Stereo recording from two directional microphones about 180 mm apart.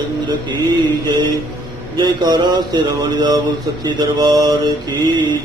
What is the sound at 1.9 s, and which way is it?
Mantra, 20° right (ahead or behind).